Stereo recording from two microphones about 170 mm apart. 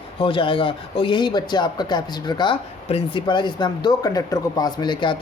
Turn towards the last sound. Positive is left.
turn(degrees=30)  # may be behind; listen again after turning